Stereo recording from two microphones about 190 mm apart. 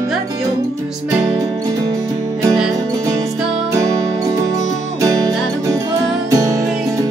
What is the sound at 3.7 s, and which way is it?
Music, 15° right (ahead or behind).